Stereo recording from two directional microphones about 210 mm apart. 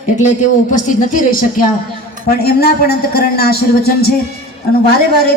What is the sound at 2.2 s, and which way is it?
A woman's voice, 50° left (ahead or behind).